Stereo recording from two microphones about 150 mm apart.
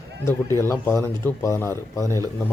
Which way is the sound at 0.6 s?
20° left (ahead or behind).